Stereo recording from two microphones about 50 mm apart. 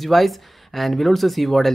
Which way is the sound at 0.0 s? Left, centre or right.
Centre.